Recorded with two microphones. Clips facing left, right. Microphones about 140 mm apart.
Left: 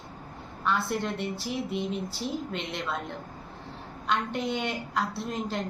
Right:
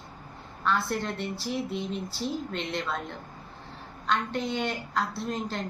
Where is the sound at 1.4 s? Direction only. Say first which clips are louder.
Even; 50° left (ahead or behind).